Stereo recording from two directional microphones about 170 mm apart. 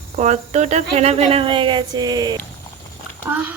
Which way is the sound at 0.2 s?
45° right (ahead or behind).